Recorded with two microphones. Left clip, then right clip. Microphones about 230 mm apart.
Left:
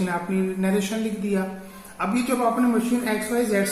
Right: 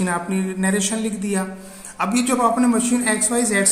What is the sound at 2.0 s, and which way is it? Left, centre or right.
A man's voice, right.